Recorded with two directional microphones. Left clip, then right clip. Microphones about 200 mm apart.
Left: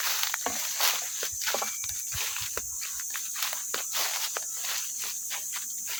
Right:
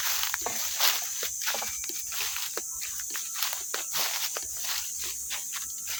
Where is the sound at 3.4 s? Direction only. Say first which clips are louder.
Even; 5° left (ahead or behind).